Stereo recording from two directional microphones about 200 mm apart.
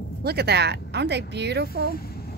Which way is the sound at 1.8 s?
50° left (ahead or behind).